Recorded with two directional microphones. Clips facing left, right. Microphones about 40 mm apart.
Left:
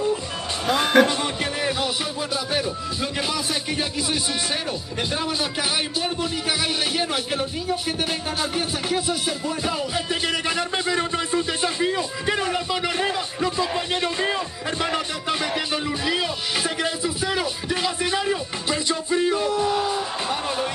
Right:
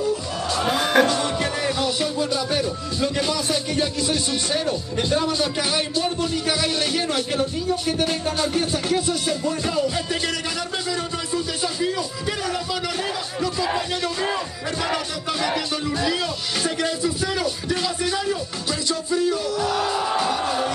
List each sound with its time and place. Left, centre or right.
0.7 s music: centre
4.6 s speech: centre
10.9 s a sound: left